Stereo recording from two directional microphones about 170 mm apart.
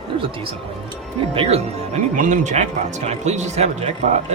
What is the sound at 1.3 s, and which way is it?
Speech, 35° right (ahead or behind).